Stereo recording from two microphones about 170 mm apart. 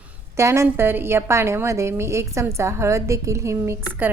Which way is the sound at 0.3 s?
15° right (ahead or behind).